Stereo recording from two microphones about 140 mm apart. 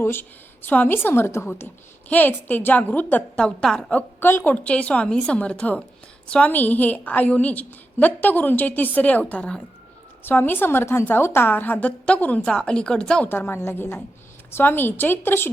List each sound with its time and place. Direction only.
0.0 s a woman's voice: 15° left (ahead or behind)